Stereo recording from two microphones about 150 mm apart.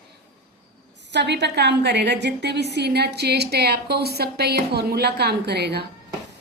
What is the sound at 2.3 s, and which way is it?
A woman's voice, 90° right.